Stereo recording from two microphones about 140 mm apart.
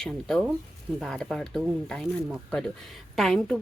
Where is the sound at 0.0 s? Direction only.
5° left (ahead or behind).